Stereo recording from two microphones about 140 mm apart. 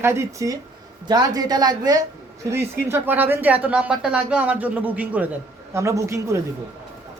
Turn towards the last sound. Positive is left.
turn(degrees=-20)  # may be behind; listen again after turning